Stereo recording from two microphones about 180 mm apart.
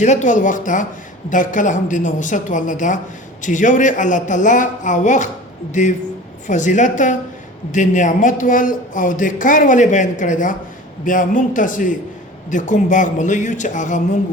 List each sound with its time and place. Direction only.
0.0 s speech: 40° left (ahead or behind)